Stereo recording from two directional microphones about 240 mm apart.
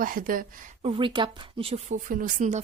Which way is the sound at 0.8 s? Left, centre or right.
Right.